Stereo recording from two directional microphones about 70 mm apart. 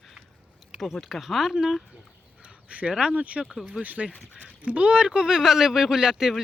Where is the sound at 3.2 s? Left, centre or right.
Centre.